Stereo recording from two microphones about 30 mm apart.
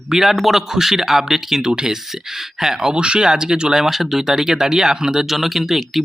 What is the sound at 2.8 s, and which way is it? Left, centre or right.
Speech, right.